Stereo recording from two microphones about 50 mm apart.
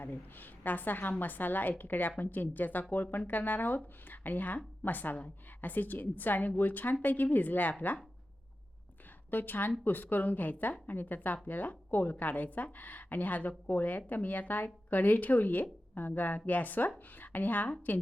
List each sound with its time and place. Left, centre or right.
0.0 s speech: left
9.3 s speech: left